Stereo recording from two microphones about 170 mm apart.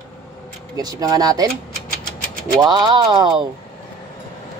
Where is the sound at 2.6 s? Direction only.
25° right (ahead or behind).